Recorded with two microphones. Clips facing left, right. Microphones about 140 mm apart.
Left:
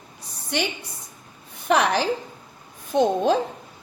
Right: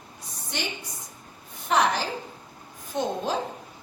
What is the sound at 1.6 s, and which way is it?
A woman's voice, 70° left (ahead or behind).